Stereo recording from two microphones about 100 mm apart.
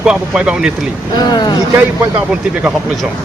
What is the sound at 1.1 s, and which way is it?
Speech, 45° left (ahead or behind).